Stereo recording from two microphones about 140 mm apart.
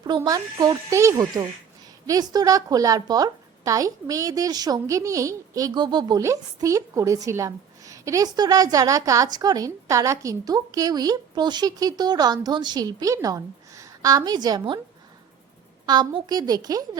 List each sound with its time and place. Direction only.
0.3 s a woman's voice: 25° right (ahead or behind)
15.9 s a woman's voice: 30° right (ahead or behind)